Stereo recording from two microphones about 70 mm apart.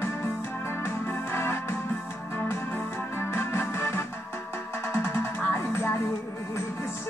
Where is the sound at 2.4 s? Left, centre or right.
Left.